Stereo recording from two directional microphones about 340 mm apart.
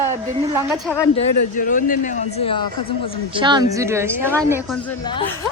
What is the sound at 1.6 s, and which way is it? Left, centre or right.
A woman's voice, left.